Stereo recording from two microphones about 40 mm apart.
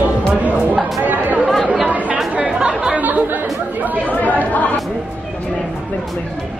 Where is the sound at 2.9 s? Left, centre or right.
Right.